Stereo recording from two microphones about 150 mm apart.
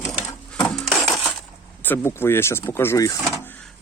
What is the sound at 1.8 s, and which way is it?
Speech, 15° left (ahead or behind).